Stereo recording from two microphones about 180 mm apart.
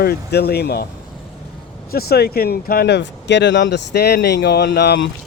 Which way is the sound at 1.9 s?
60° left (ahead or behind).